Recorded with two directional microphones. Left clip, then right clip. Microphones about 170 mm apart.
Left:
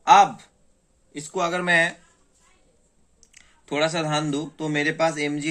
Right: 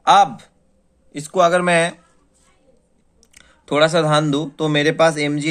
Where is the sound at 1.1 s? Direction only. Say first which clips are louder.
Right 10 dB; 50° right (ahead or behind).